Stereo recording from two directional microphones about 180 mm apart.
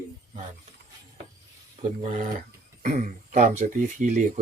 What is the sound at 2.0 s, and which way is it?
Speech, 45° right (ahead or behind).